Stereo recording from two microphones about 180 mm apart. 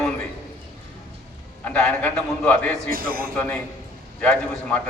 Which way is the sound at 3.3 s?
10° left (ahead or behind).